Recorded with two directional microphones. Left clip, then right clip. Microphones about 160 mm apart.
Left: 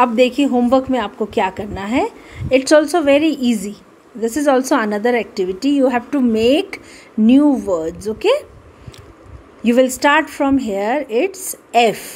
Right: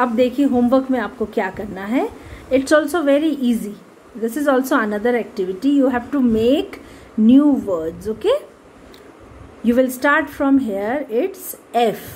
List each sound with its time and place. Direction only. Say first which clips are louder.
0.0 s a woman's voice: left 3 dB; 35° left (ahead or behind)
9.7 s a woman's voice: left 3 dB; 35° left (ahead or behind)